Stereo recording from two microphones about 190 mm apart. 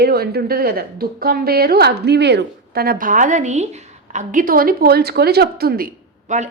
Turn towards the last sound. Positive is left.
turn(degrees=-45)  # may be behind; listen again after turning